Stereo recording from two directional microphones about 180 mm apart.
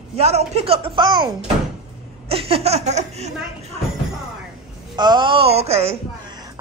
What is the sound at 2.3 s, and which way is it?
Speech, 30° right (ahead or behind).